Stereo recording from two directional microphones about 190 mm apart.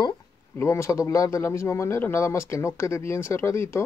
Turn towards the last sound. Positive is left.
turn(degrees=15)  # may be behind; listen again after turning